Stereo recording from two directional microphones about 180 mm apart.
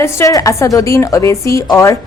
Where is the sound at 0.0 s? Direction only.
15° left (ahead or behind).